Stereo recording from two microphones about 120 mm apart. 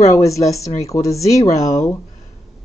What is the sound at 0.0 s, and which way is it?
Speech, 25° left (ahead or behind).